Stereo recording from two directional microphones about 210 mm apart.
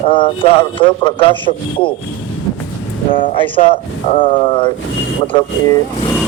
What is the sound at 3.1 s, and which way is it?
Speech, 40° left (ahead or behind).